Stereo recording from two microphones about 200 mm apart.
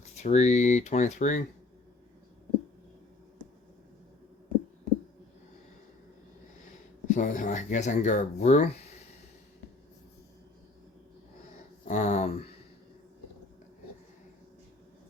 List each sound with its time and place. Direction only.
0.0 s speech: 35° left (ahead or behind)
7.1 s speech: 40° left (ahead or behind)
11.9 s speech: 35° left (ahead or behind)